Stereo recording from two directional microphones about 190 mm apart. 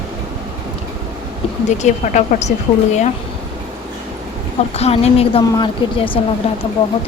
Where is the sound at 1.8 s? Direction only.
40° left (ahead or behind).